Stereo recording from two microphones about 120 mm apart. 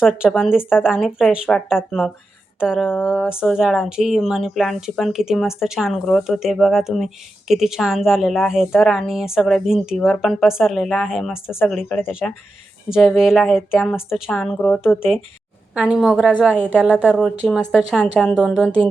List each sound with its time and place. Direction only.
0.0 s speech: 5° right (ahead or behind)
14.9 s speech: 20° left (ahead or behind)
15.7 s a woman's voice: 10° right (ahead or behind)
17.1 s speech: 5° left (ahead or behind)